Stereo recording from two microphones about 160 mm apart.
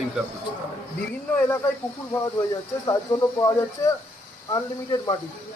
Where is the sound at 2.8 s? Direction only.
20° left (ahead or behind).